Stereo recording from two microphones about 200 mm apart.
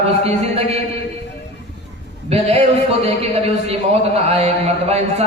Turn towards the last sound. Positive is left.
turn(degrees=-30)  # may be behind; listen again after turning